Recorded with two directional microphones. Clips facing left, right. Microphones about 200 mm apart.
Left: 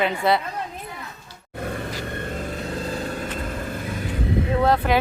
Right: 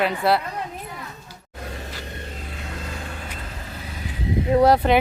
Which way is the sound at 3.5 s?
50° left (ahead or behind).